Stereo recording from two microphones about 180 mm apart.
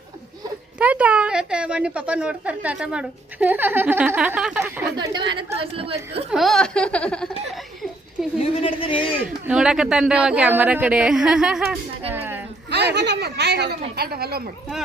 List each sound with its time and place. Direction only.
0.8 s a woman's voice: 5° right (ahead or behind)
4.9 s a woman's voice: 25° right (ahead or behind)
6.3 s laughter: centre (ahead or behind)
8.4 s a woman's voice: 30° left (ahead or behind)
9.5 s a woman's voice: 5° right (ahead or behind)
12.7 s speech: 70° right (ahead or behind)